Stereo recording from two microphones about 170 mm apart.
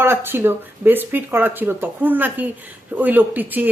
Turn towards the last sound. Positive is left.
turn(degrees=-10)  # may be behind; listen again after turning